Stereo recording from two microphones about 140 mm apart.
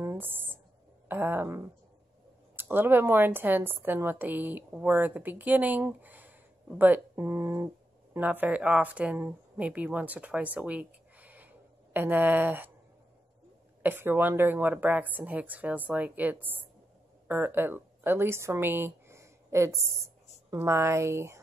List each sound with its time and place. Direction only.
0.0 s a woman's voice: 15° right (ahead or behind)
13.8 s a woman's voice: 15° right (ahead or behind)